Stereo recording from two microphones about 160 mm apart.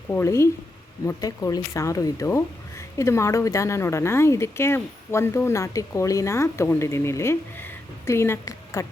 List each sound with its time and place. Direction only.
0.1 s speech: 15° left (ahead or behind)